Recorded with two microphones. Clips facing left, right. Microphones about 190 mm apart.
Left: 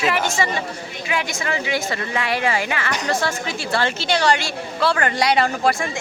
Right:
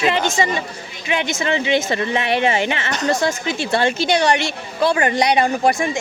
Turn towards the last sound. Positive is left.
turn(degrees=-20)  # may be behind; listen again after turning